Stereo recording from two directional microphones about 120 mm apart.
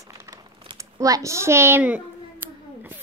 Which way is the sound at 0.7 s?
25° right (ahead or behind).